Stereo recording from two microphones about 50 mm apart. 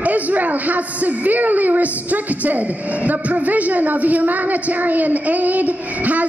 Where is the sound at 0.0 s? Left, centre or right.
Right.